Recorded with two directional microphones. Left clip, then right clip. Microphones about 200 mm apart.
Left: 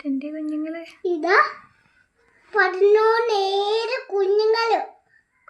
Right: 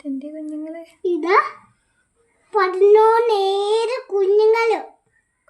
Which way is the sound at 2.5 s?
65° right (ahead or behind).